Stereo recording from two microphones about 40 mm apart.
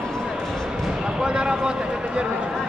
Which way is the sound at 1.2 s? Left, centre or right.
Right.